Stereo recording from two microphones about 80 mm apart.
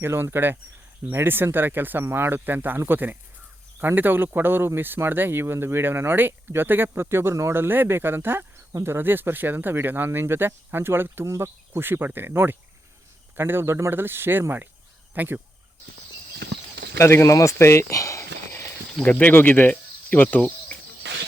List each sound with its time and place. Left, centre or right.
0.0 s speech: right
17.0 s speech: left
19.0 s speech: left